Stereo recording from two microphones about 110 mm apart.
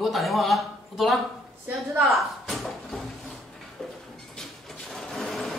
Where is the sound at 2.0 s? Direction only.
Centre (ahead or behind).